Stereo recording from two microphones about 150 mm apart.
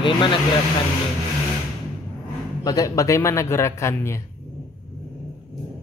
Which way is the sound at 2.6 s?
25° left (ahead or behind).